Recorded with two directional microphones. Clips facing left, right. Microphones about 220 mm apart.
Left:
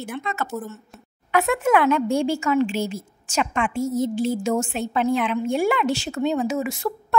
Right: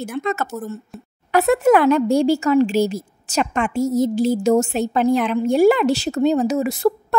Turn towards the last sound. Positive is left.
turn(degrees=-35)  # may be behind; listen again after turning